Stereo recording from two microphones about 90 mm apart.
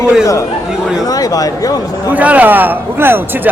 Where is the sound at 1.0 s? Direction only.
45° left (ahead or behind).